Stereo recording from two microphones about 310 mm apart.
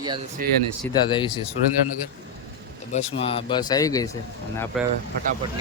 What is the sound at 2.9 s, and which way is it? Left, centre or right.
Speech, centre.